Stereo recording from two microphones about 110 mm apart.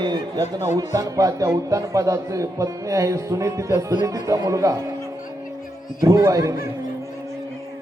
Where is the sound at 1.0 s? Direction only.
30° right (ahead or behind).